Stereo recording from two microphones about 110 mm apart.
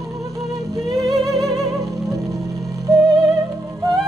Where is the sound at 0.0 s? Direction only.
30° right (ahead or behind).